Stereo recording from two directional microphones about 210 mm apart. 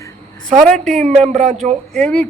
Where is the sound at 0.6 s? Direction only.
Centre (ahead or behind).